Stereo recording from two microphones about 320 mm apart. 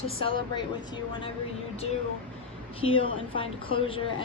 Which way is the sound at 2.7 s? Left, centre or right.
Centre.